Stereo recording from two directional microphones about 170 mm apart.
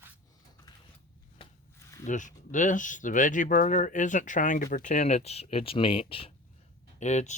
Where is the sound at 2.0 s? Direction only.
45° left (ahead or behind).